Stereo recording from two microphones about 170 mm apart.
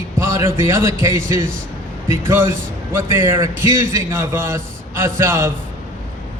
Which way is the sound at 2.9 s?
15° right (ahead or behind).